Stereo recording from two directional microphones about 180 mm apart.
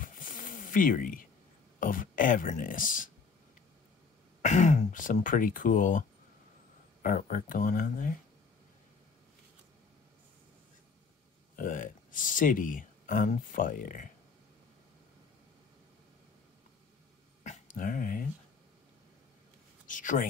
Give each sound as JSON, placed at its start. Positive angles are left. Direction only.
{"t": 0.0, "sound": "a sound", "side_deg": 50}
{"t": 1.8, "sound": "speech", "side_deg": 50}
{"t": 4.4, "sound": "speech", "side_deg": 40}
{"t": 11.5, "sound": "speech", "side_deg": 50}
{"t": 17.4, "sound": "dog", "side_deg": 40}
{"t": 19.9, "sound": "speech", "side_deg": 45}